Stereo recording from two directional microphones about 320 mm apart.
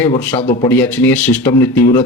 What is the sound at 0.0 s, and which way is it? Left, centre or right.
Speech, centre.